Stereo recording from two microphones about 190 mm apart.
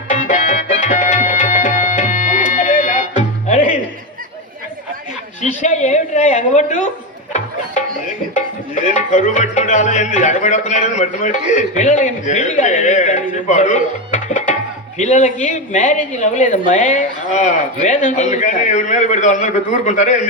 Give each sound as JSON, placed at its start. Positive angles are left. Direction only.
{"t": 0.1, "sound": "music", "side_deg": 40}
{"t": 5.4, "sound": "a sound", "side_deg": 40}
{"t": 7.3, "sound": "music", "side_deg": 40}
{"t": 8.4, "sound": "a woman's voice", "side_deg": 40}
{"t": 13.3, "sound": "music", "side_deg": 40}
{"t": 14.9, "sound": "a woman's voice", "side_deg": 40}